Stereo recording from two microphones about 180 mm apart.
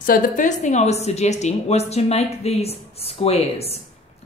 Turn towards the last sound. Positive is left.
turn(degrees=30)  # may be behind; listen again after turning